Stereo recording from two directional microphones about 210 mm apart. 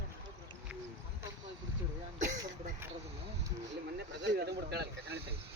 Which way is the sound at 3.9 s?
55° right (ahead or behind).